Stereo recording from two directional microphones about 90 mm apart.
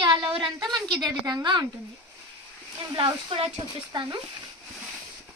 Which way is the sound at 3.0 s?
70° right (ahead or behind).